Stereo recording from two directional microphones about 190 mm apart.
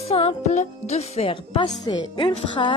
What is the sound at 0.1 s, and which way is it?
Speech, 30° left (ahead or behind).